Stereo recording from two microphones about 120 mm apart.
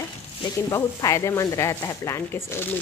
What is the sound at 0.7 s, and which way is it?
Speech, 30° left (ahead or behind).